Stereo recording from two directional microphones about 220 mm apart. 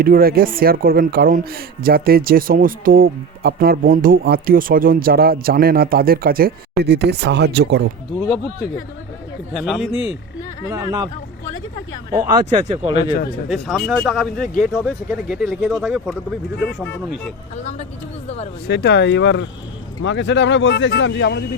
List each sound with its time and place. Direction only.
0.0 s a man's voice: 40° right (ahead or behind)
9.6 s speech: centre (ahead or behind)
10.7 s speech: 15° right (ahead or behind)
12.5 s speech: 30° right (ahead or behind)
13.5 s speech: centre (ahead or behind)
18.7 s speech: 50° left (ahead or behind)